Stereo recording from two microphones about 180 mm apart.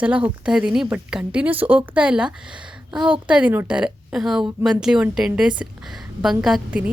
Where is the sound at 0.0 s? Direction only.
5° right (ahead or behind).